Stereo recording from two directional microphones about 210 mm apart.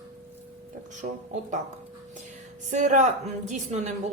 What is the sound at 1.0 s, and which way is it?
Speech, 40° right (ahead or behind).